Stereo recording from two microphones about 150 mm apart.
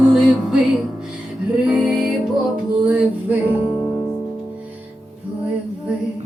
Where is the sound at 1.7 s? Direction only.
5° right (ahead or behind).